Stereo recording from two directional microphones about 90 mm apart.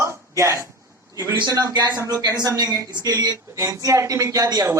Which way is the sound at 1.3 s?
55° right (ahead or behind).